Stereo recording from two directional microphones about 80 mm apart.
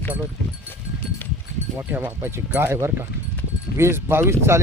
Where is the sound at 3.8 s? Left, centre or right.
Right.